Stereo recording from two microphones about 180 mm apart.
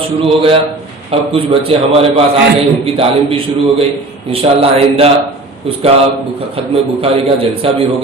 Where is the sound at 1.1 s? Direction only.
30° right (ahead or behind).